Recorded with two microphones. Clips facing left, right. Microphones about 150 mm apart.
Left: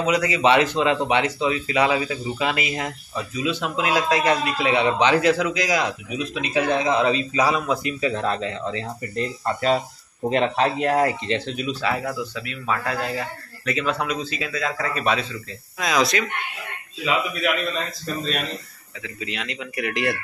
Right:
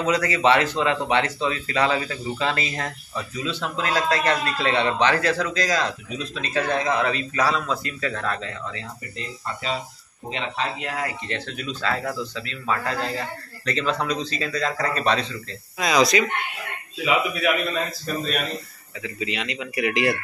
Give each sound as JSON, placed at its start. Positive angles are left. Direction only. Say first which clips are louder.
{"t": 0.0, "sound": "speech", "louder": "left 1 dB", "side_deg": 15}
{"t": 9.1, "sound": "speech", "louder": "left 9 dB", "side_deg": 50}
{"t": 11.2, "sound": "speech", "louder": "left 5 dB", "side_deg": 20}
{"t": 18.0, "sound": "speech", "louder": "right 1 dB", "side_deg": -5}